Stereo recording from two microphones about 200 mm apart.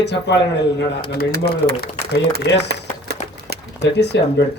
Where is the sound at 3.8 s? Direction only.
60° left (ahead or behind).